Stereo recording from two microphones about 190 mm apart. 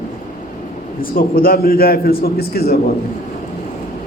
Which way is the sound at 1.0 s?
50° left (ahead or behind).